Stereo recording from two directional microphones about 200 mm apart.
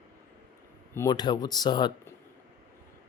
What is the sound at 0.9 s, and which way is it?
Speech, 15° left (ahead or behind).